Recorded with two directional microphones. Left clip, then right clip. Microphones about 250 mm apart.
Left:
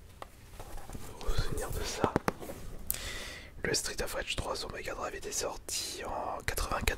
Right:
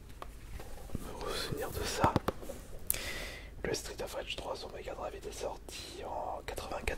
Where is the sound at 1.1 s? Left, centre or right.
Centre.